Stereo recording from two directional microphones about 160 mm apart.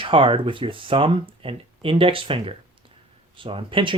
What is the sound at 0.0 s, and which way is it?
Speech, 35° right (ahead or behind).